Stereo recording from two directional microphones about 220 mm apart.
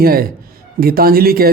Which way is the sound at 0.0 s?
45° right (ahead or behind).